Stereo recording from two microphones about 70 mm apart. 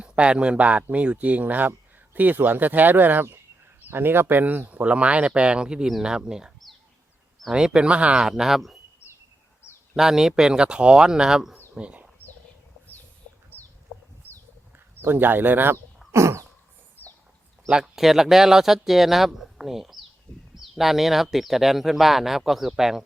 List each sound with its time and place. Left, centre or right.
0.0 s speech: centre
7.5 s speech: centre
9.9 s speech: centre
11.7 s bird: centre
14.2 s a sound: left
15.0 s speech: right
16.1 s a sound: right
17.7 s speech: centre